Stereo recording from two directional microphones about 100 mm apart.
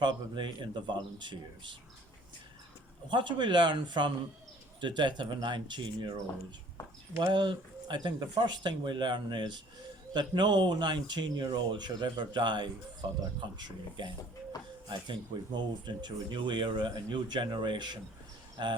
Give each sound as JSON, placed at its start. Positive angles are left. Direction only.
{"t": 0.0, "sound": "speech", "side_deg": -50}
{"t": 3.1, "sound": "speech", "side_deg": -50}
{"t": 7.2, "sound": "speech", "side_deg": -50}